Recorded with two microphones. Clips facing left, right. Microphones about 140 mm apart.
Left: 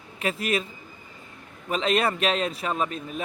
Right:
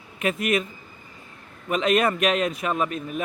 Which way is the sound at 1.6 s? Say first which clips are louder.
Right 3 dB; 30° left (ahead or behind).